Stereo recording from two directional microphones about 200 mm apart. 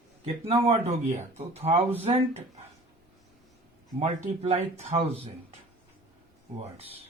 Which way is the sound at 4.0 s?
30° right (ahead or behind).